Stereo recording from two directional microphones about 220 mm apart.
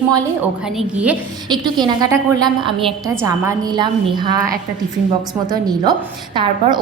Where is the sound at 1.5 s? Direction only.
20° right (ahead or behind).